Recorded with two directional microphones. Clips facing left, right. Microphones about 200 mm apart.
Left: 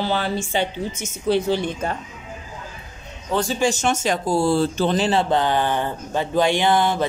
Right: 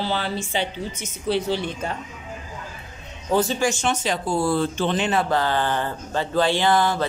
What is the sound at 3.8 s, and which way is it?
Speech, 45° left (ahead or behind).